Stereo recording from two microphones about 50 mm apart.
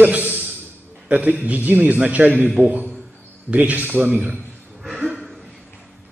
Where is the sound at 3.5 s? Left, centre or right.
Right.